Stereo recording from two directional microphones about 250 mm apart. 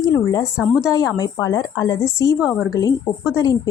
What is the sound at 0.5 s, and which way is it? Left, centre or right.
Speech, centre.